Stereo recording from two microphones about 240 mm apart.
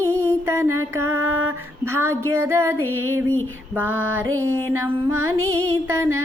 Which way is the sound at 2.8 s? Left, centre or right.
Right.